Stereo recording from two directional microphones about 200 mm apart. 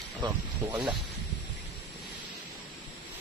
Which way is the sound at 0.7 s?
5° right (ahead or behind).